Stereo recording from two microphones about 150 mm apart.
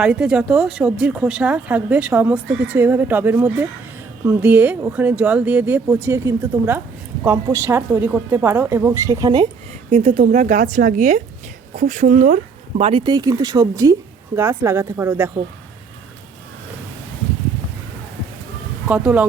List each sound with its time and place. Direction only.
0.0 s speech: 5° right (ahead or behind); by 9.5 s 25° right (ahead or behind)
9.9 s a woman's voice: 50° right (ahead or behind)
13.1 s speech: 25° right (ahead or behind)
18.9 s speech: 10° right (ahead or behind)